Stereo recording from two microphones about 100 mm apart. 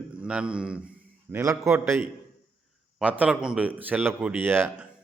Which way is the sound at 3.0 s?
15° right (ahead or behind).